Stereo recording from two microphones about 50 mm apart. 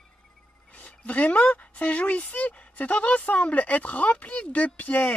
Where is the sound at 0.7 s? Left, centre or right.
Left.